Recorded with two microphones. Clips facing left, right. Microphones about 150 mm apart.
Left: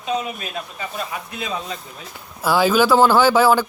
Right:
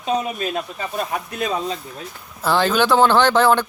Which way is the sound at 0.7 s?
45° right (ahead or behind).